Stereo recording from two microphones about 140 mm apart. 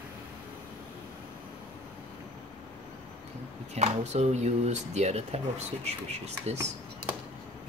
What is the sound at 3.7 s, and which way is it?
Speech, 50° right (ahead or behind).